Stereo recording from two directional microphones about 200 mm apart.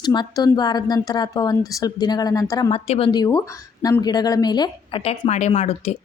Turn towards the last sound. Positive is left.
turn(degrees=30)  # may be behind; listen again after turning